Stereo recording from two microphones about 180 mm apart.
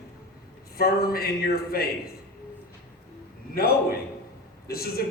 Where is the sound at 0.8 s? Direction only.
55° left (ahead or behind).